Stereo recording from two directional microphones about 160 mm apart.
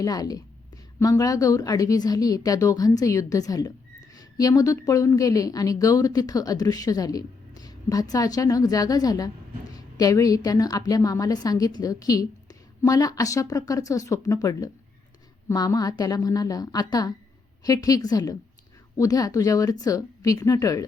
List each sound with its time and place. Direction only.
0.0 s a woman's voice: 25° left (ahead or behind)